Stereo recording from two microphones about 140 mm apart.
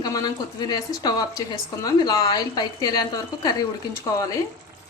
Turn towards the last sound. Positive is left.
turn(degrees=25)  # may be behind; listen again after turning